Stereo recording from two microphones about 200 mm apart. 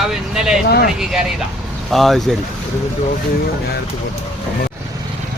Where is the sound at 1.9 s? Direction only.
Centre (ahead or behind).